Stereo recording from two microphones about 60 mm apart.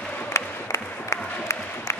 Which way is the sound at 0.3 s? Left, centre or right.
Left.